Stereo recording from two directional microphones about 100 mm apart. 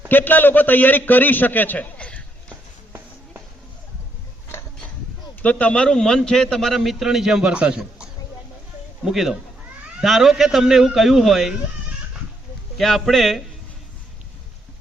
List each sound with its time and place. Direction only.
0.1 s a man's voice: 20° left (ahead or behind)
5.4 s a man's voice: 15° left (ahead or behind); by 11.5 s centre (ahead or behind)
12.7 s a man's voice: centre (ahead or behind)